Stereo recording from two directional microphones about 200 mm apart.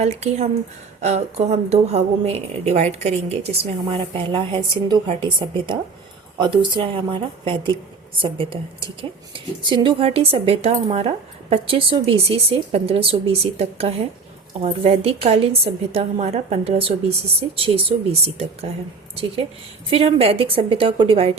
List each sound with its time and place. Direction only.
0.0 s a woman's voice: 35° right (ahead or behind)
19.9 s a woman's voice: 30° right (ahead or behind)